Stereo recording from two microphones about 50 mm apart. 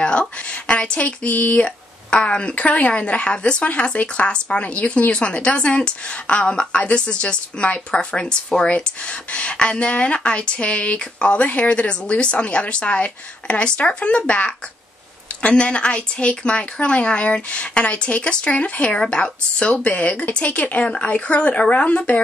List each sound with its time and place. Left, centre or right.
0.0 s speech: left
1.6 s speech: left